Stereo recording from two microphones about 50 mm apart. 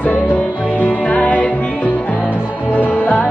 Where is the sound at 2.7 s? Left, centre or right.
Left.